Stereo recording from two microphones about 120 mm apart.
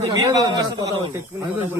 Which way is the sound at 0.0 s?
30° right (ahead or behind).